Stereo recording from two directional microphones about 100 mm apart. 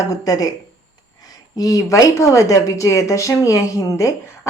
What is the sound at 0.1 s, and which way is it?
Speech, 35° left (ahead or behind).